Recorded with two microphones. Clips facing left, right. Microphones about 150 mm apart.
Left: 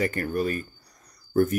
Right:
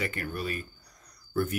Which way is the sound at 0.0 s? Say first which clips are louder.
Left 8 dB; 45° left (ahead or behind).